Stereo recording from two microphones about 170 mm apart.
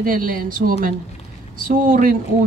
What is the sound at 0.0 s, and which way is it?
Speech, 55° right (ahead or behind).